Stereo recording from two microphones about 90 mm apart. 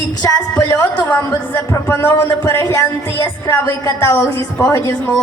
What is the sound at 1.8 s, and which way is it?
A woman's voice, 25° left (ahead or behind).